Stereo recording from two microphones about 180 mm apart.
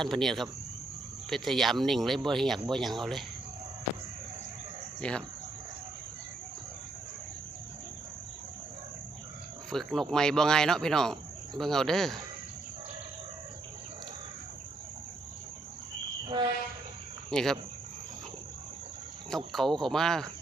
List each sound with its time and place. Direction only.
0.0 s speech: centre (ahead or behind)
4.9 s speech: 5° left (ahead or behind)
9.6 s speech: centre (ahead or behind)
16.2 s train: 25° right (ahead or behind)
17.3 s speech: 5° left (ahead or behind)
19.5 s speech: centre (ahead or behind)